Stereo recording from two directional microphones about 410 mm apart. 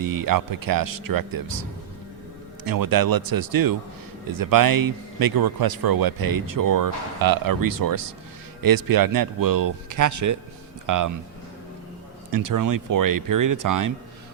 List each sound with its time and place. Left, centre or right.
0.0 s speech: right
2.6 s speech: right
12.3 s speech: right